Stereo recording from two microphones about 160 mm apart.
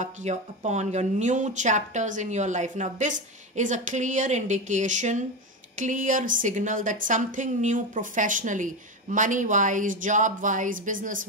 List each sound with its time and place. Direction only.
0.0 s speech: 45° right (ahead or behind)